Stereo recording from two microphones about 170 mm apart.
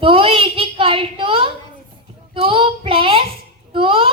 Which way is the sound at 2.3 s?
30° right (ahead or behind).